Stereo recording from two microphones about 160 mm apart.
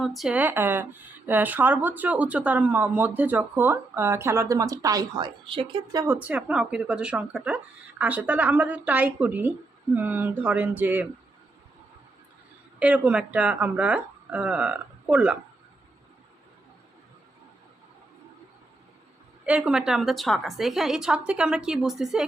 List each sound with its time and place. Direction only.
0.0 s speech: centre (ahead or behind); by 6.0 s 30° right (ahead or behind)
6.0 s speech: 10° right (ahead or behind)
12.8 s speech: 10° right (ahead or behind)
19.5 s a woman's voice: 5° right (ahead or behind)